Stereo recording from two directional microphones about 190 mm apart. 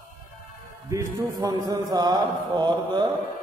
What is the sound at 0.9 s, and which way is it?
Mantra, 15° right (ahead or behind).